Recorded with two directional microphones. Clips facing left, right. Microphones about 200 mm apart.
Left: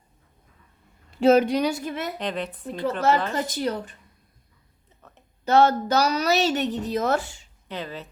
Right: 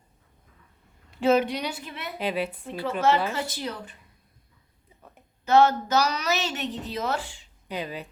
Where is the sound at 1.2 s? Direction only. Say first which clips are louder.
Left 5 dB; 40° left (ahead or behind).